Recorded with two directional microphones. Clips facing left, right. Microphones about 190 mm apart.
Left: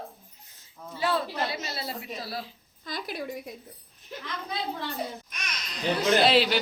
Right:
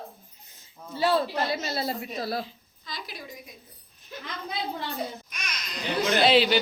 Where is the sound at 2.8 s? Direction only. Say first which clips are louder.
Left 6 dB; 55° left (ahead or behind).